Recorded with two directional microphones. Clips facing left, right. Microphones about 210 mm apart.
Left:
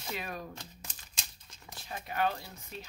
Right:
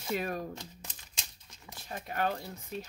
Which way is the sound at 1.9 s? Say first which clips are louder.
Even; 45° right (ahead or behind).